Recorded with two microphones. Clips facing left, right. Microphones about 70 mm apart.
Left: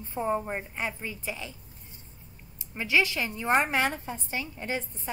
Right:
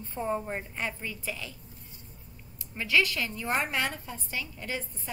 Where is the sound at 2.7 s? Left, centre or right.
Left.